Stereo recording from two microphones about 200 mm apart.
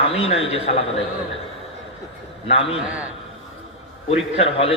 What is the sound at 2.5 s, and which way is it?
Speech, 30° left (ahead or behind).